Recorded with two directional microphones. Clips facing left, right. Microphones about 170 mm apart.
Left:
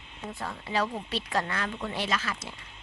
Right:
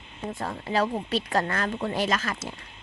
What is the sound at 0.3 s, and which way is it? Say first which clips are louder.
A woman's voice: right 5 dB; 40° right (ahead or behind).